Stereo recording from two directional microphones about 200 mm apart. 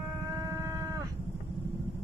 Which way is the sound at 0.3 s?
15° right (ahead or behind).